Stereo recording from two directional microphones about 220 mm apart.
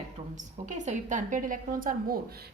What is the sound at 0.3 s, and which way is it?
A woman's voice, 35° right (ahead or behind).